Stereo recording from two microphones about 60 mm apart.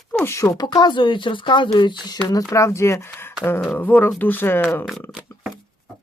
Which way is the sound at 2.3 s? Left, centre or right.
Left.